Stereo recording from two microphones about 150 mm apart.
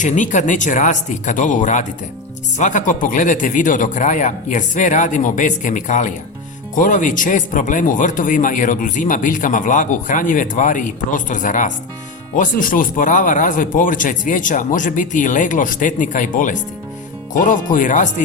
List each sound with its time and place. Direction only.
0.0 s speech: 55° left (ahead or behind)